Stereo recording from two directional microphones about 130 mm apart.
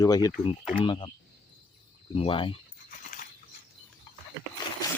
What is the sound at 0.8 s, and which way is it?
Speech, 40° left (ahead or behind).